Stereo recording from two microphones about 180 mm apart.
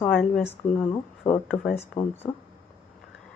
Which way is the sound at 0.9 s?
35° left (ahead or behind).